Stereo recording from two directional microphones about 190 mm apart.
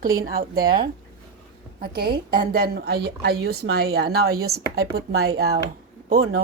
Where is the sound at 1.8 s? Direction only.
55° right (ahead or behind).